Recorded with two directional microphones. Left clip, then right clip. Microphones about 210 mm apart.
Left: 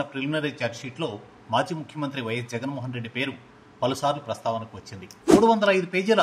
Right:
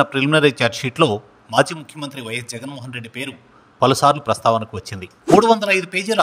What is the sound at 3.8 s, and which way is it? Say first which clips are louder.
A man's voice: right 11 dB; 55° right (ahead or behind).